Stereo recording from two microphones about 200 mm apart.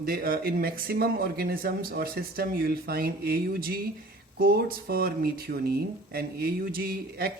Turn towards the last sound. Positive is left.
turn(degrees=-50)  # may be behind; listen again after turning